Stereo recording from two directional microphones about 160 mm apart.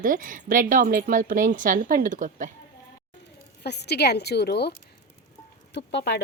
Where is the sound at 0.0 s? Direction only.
55° right (ahead or behind).